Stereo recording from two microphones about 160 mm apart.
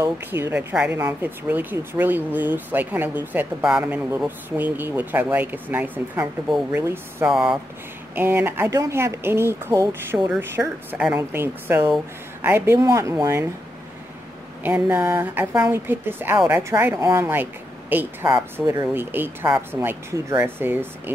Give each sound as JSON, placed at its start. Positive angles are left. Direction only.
{"t": 0.0, "sound": "a woman's voice", "side_deg": -15}
{"t": 7.2, "sound": "speech", "side_deg": 0}
{"t": 8.1, "sound": "a woman's voice", "side_deg": -15}
{"t": 14.6, "sound": "a woman's voice", "side_deg": -10}